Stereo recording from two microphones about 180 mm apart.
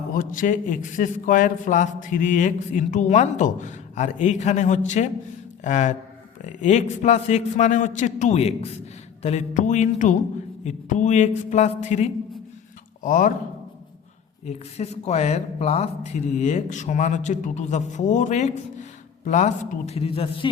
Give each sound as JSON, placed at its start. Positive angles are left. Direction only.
{"t": 0.1, "sound": "a man's voice", "side_deg": 50}
{"t": 14.4, "sound": "speech", "side_deg": 40}